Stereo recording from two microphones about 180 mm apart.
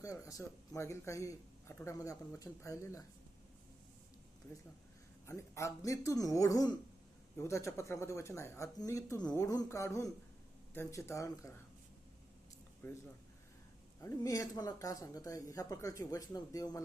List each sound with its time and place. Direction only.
0.0 s a man's voice: 20° left (ahead or behind)
5.2 s a man's voice: 15° left (ahead or behind)
12.8 s a man's voice: 10° left (ahead or behind)
14.0 s a man's voice: 20° left (ahead or behind)